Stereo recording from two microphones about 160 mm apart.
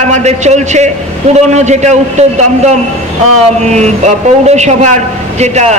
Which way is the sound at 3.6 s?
45° right (ahead or behind).